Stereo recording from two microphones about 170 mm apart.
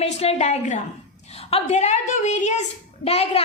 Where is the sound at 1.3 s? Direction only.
35° left (ahead or behind).